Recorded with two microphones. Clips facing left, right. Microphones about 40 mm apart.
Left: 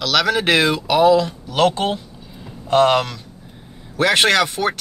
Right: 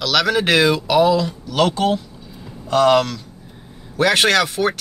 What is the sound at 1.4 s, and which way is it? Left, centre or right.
Speech, left.